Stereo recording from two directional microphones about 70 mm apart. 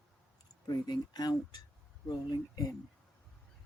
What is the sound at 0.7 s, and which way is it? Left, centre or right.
Speech, left.